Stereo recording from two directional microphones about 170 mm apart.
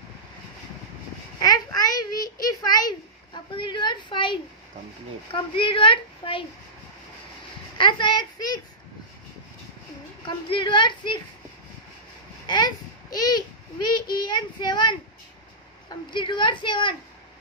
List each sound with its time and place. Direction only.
1.4 s a sound: 25° left (ahead or behind)
2.4 s a woman's voice: 25° left (ahead or behind)
7.7 s speech: 30° left (ahead or behind)
10.2 s speech: 30° left (ahead or behind)
12.4 s a sound: 25° left (ahead or behind)
14.1 s speech: 25° left (ahead or behind)
16.1 s speech: 30° left (ahead or behind)